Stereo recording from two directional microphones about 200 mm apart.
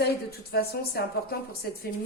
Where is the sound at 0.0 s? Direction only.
50° left (ahead or behind).